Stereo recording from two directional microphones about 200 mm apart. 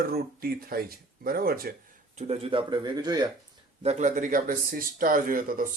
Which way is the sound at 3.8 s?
35° right (ahead or behind).